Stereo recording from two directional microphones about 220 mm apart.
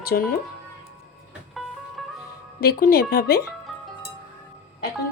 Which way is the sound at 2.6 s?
45° left (ahead or behind).